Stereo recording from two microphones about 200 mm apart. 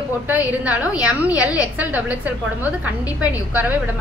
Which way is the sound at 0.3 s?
5° right (ahead or behind).